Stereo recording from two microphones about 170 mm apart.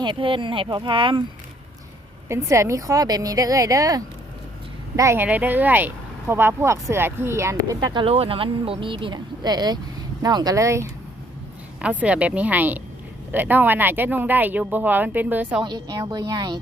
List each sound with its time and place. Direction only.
0.0 s speech: 30° right (ahead or behind)
2.3 s speech: 15° right (ahead or behind)
15.6 s speech: 25° right (ahead or behind)